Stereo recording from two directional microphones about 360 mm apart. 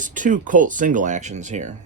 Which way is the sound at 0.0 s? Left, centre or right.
Right.